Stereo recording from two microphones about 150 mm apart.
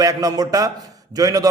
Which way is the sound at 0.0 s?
25° right (ahead or behind).